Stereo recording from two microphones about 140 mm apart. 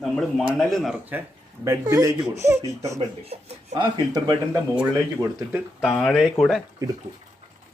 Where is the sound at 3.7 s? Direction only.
30° right (ahead or behind).